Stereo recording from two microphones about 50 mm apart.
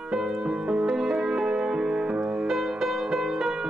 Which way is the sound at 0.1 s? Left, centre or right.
Centre.